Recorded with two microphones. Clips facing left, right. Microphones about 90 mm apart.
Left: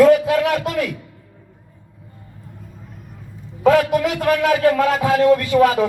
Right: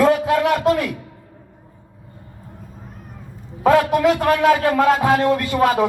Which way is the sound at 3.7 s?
30° right (ahead or behind).